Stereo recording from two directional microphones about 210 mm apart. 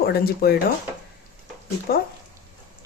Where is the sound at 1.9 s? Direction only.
45° left (ahead or behind).